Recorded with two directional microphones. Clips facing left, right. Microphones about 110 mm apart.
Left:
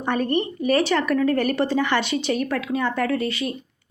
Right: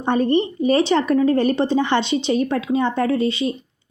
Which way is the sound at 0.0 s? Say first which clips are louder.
Right 5 dB; 25° right (ahead or behind).